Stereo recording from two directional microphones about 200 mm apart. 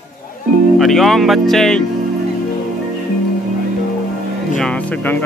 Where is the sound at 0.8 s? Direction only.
Centre (ahead or behind).